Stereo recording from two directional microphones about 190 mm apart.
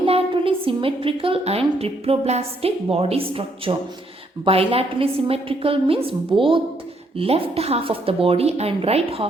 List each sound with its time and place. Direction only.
0.0 s a woman's voice: 30° right (ahead or behind)